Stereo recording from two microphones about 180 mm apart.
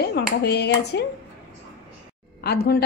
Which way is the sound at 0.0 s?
65° left (ahead or behind).